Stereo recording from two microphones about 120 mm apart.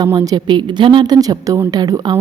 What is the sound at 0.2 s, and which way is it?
A woman's voice, 40° right (ahead or behind).